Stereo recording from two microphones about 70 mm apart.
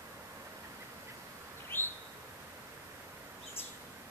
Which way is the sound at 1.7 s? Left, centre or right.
Left.